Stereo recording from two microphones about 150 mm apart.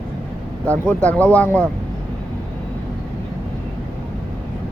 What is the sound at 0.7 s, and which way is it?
Speech, 10° left (ahead or behind).